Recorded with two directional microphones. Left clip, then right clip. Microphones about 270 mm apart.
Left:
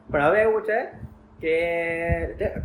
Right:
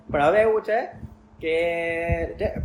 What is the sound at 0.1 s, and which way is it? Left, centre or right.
Speech, centre.